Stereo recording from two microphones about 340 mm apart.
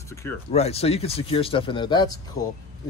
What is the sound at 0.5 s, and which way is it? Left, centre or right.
Speech, centre.